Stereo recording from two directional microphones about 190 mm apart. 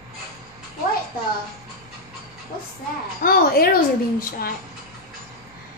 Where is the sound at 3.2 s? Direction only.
50° left (ahead or behind).